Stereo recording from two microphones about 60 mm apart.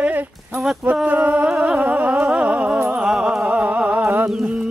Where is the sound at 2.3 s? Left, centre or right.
Right.